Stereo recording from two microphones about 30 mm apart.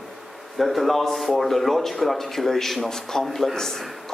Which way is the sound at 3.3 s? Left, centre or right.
Centre.